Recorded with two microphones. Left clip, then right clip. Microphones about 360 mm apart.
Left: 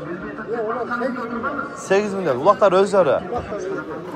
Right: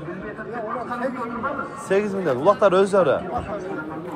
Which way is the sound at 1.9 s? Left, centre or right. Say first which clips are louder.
Left 2 dB; centre.